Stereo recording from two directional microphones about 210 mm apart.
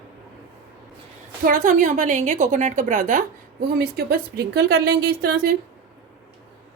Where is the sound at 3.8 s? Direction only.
50° right (ahead or behind).